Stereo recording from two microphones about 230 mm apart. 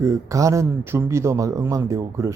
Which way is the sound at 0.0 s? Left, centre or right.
Centre.